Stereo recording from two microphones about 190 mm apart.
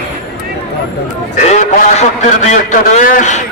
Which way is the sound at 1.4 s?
35° left (ahead or behind).